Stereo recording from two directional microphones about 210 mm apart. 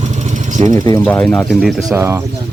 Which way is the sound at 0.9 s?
5° left (ahead or behind).